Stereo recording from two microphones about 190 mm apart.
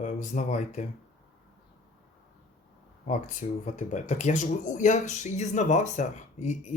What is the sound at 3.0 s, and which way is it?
Speech, 40° left (ahead or behind).